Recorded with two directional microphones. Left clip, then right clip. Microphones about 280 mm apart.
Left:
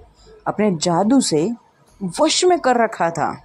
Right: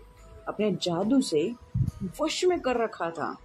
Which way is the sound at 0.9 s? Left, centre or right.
Left.